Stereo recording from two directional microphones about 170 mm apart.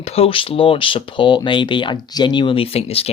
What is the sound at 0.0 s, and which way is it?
Speech, 35° left (ahead or behind).